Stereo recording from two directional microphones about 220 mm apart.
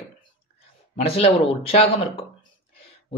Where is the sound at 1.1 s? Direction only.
25° left (ahead or behind).